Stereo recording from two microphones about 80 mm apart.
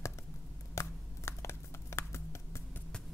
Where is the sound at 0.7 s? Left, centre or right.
Left.